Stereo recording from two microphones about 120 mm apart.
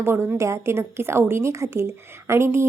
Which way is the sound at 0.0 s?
20° right (ahead or behind).